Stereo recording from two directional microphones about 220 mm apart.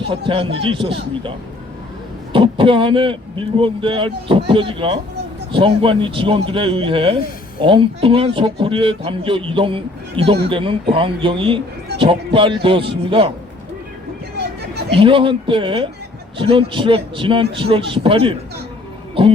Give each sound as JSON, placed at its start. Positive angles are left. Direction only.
{"t": 0.3, "sound": "speech", "side_deg": -25}
{"t": 14.3, "sound": "a sound", "side_deg": -50}
{"t": 14.9, "sound": "speech", "side_deg": -25}